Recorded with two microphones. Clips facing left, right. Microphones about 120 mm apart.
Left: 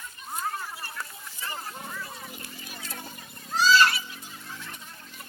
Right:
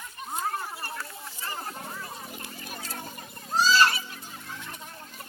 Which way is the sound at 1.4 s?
35° right (ahead or behind).